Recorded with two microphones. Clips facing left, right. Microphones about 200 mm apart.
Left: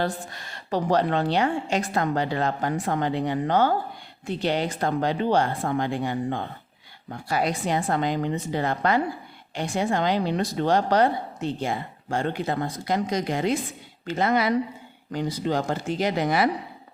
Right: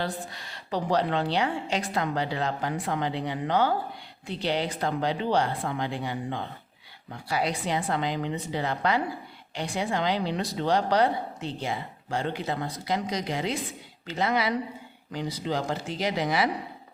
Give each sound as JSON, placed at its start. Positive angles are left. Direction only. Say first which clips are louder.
{"t": 0.0, "sound": "a woman's voice", "louder": "left 4 dB", "side_deg": 50}